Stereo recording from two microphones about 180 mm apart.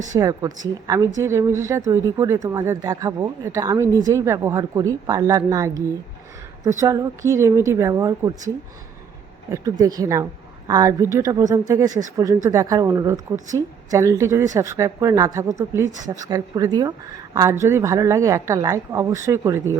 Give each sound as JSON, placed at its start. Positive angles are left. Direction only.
{"t": 0.1, "sound": "a woman's voice", "side_deg": -20}
{"t": 6.7, "sound": "speech", "side_deg": -15}
{"t": 9.5, "sound": "a woman's voice", "side_deg": -20}